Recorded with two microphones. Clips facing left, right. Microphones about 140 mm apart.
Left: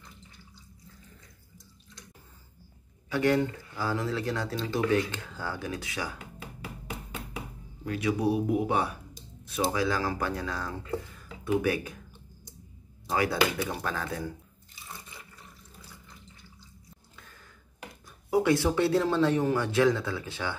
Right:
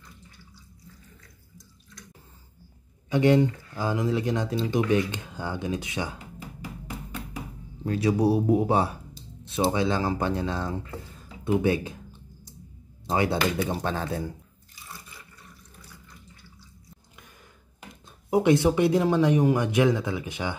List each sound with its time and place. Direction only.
3.1 s speech: 20° right (ahead or behind)
7.8 s speech: 35° right (ahead or behind)
11.1 s a sound: 25° right (ahead or behind)
13.1 s speech: 25° right (ahead or behind)
17.1 s a sound: 15° right (ahead or behind)
18.0 s speech: 20° right (ahead or behind)